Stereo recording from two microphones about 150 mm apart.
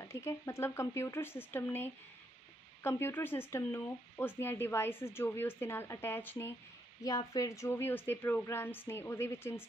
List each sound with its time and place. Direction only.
0.0 s speech: 20° left (ahead or behind)